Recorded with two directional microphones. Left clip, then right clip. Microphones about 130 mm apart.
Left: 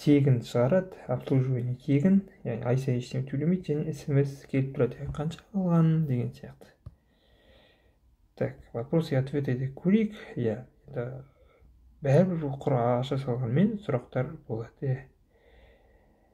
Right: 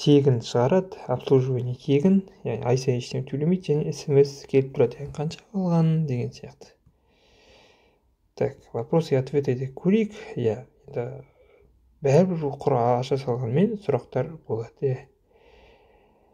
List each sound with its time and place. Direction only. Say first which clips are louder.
0.0 s speech: right 5 dB; 40° right (ahead or behind)
5.8 s speech: right 2 dB; 30° right (ahead or behind)
6.1 s speech: right 3 dB; 40° right (ahead or behind)
7.4 s snort: right 5 dB; 40° right (ahead or behind)
8.4 s speech: right 6 dB; 45° right (ahead or behind)